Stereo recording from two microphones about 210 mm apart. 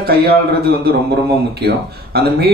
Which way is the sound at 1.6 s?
50° right (ahead or behind).